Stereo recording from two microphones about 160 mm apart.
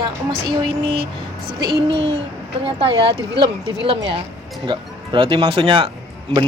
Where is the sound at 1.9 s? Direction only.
40° right (ahead or behind).